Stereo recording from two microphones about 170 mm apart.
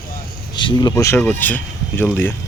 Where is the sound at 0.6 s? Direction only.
25° left (ahead or behind).